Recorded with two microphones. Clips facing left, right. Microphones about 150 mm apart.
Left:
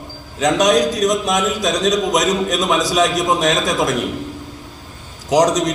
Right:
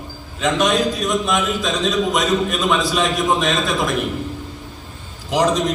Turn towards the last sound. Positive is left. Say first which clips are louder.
# left 3 dB
turn(degrees=40)  # may be behind; listen again after turning